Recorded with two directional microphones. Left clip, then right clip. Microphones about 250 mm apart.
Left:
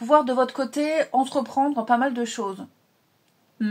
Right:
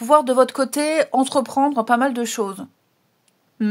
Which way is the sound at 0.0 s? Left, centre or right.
Right.